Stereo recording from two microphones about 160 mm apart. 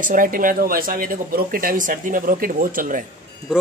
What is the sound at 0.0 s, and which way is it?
Speech, 60° right (ahead or behind).